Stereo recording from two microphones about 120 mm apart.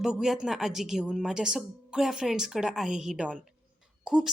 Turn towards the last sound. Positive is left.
turn(degrees=-5)  # may be behind; listen again after turning